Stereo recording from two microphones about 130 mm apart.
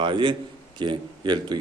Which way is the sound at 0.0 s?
40° right (ahead or behind).